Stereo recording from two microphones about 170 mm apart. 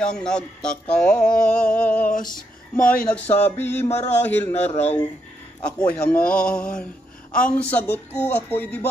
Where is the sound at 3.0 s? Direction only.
10° left (ahead or behind).